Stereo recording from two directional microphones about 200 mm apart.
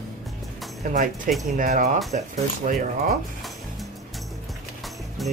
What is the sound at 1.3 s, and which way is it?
Speech, 40° right (ahead or behind).